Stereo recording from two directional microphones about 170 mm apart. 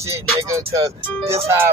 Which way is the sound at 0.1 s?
20° right (ahead or behind).